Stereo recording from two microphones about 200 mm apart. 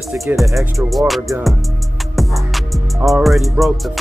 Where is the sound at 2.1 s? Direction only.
Centre (ahead or behind).